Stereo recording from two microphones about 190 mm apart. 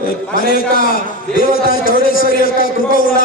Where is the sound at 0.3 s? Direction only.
50° left (ahead or behind).